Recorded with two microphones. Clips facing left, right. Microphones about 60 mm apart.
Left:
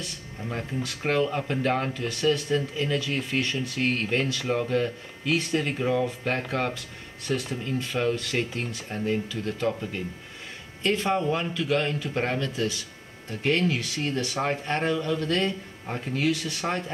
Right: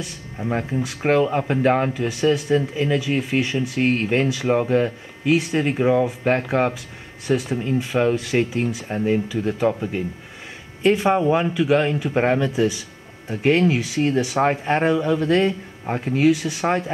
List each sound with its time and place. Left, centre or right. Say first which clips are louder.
0.4 s speech: right 8 dB; right